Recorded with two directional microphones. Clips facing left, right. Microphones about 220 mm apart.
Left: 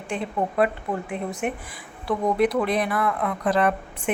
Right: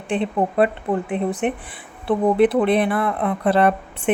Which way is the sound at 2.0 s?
30° right (ahead or behind).